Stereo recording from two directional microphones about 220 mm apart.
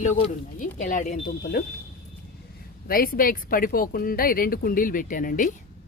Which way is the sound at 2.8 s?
40° left (ahead or behind).